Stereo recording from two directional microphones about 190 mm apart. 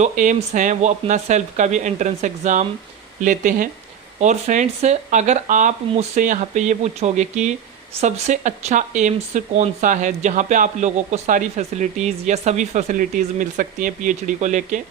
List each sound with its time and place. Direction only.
0.0 s speech: 40° right (ahead or behind)